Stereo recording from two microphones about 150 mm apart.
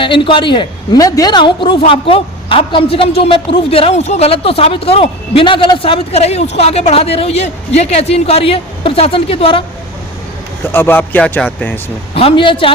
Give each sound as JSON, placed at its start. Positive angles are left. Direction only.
{"t": 0.0, "sound": "a woman's voice", "side_deg": 35}
{"t": 10.7, "sound": "speech", "side_deg": 15}
{"t": 12.1, "sound": "a woman's voice", "side_deg": 35}